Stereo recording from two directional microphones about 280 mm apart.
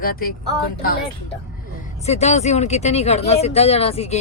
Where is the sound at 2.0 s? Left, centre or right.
Left.